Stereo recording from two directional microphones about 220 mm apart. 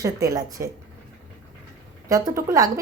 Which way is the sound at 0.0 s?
15° right (ahead or behind).